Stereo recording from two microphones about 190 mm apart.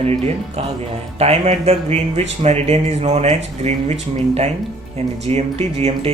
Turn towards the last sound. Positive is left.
turn(degrees=-35)  # may be behind; listen again after turning